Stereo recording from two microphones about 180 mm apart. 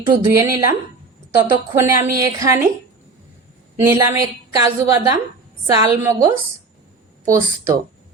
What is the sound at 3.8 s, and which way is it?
Speech, 15° right (ahead or behind).